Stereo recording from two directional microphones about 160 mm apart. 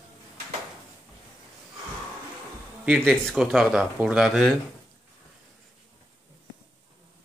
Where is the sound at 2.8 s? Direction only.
Centre (ahead or behind).